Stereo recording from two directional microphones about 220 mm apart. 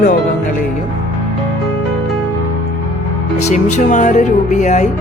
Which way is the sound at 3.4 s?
30° left (ahead or behind).